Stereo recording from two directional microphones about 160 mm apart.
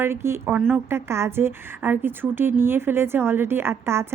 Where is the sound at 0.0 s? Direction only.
15° right (ahead or behind).